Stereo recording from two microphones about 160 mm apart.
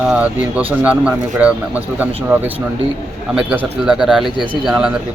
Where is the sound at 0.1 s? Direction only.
10° right (ahead or behind).